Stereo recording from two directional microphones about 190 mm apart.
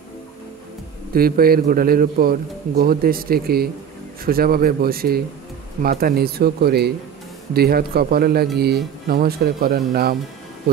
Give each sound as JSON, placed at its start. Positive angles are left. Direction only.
{"t": 1.1, "sound": "a man's voice", "side_deg": -50}